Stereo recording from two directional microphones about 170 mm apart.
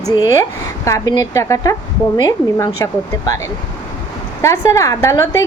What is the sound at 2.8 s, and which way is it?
Speech, 20° left (ahead or behind).